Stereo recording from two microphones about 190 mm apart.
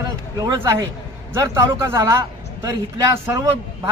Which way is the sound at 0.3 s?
15° right (ahead or behind).